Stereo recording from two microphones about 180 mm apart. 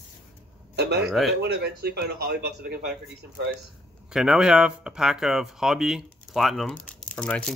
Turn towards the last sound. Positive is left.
turn(degrees=5)  # may be behind; listen again after turning